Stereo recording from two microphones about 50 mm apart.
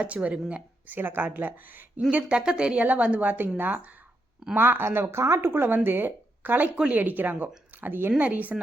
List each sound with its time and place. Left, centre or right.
0.0 s speech: right
0.9 s speech: right
2.0 s speech: right
4.5 s speech: right
5.5 s speech: right
8.2 s speech: right